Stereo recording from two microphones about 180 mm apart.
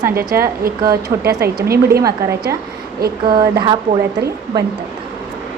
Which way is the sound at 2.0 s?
15° right (ahead or behind).